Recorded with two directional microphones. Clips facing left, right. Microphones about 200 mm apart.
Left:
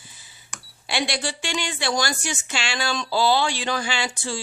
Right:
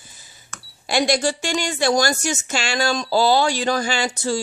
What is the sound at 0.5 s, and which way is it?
Cash register, 15° left (ahead or behind).